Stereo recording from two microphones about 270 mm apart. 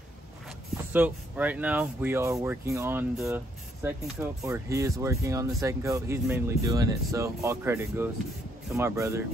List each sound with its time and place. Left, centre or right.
0.9 s speech: centre